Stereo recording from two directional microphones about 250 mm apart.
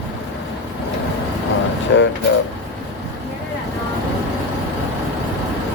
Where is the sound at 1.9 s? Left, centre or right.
Left.